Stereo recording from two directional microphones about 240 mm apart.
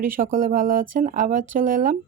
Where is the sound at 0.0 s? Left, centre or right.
Right.